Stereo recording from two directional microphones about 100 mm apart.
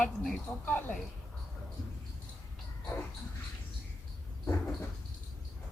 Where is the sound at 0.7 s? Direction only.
20° left (ahead or behind).